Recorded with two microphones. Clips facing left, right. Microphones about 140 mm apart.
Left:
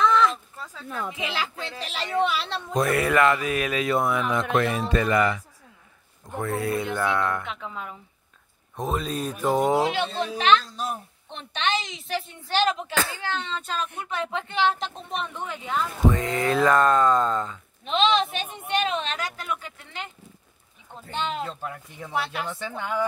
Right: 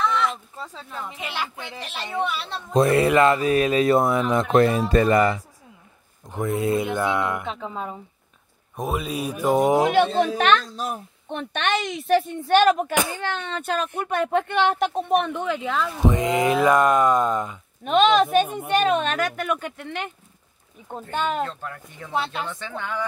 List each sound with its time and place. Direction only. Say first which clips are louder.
0.8 s a woman's voice: left 6 dB; 80° left
2.7 s speech: right 5 dB; 25° right (ahead or behind)
6.2 s speech: right 3 dB; 15° right (ahead or behind)
7.4 s speech: right 5 dB; 35° right (ahead or behind)
8.7 s speech: right 1 dB; 10° right (ahead or behind)
9.8 s speech: right 7 dB; 55° right (ahead or behind)
12.9 s speech: right 4 dB; 15° right (ahead or behind)
13.2 s speech: right 2 dB; 60° right (ahead or behind); by 15.7 s 90° right
16.1 s speech: right 4 dB; 15° right (ahead or behind)
17.8 s speech: right 5 dB; 50° right (ahead or behind); by 20.1 s 65° right (ahead or behind)
20.9 s speech: right 5 dB; 50° right (ahead or behind)
21.5 s speech: even; 10° left (ahead or behind)
22.1 s speech: right 2 dB; 25° right (ahead or behind)
22.5 s speech: left 1 dB; 10° left (ahead or behind)